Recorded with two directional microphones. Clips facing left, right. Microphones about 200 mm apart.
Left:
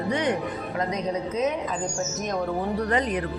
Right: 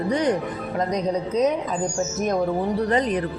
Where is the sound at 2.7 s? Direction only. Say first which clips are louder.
Right 3 dB; 35° right (ahead or behind).